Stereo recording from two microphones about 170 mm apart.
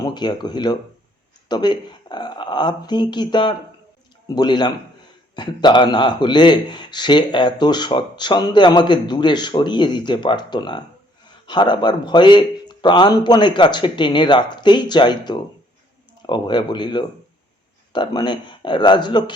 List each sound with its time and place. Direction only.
0.0 s speech: 25° left (ahead or behind)